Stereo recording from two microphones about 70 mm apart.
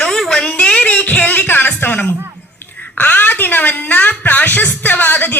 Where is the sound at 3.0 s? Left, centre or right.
Left.